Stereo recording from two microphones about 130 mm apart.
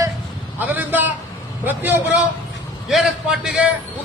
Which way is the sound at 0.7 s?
15° right (ahead or behind).